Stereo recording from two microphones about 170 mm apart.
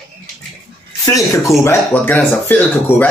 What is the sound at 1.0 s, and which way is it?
Speech, 20° left (ahead or behind).